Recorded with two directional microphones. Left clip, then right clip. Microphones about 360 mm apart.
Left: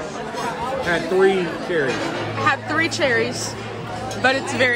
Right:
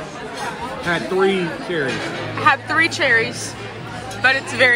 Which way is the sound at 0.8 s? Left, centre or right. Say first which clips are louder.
Even; centre.